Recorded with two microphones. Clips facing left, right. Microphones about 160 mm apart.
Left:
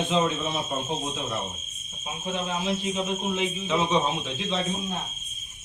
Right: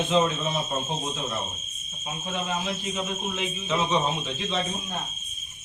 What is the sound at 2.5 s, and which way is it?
Speech, 20° left (ahead or behind).